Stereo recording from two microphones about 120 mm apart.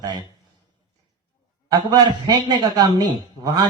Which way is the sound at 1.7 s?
35° right (ahead or behind).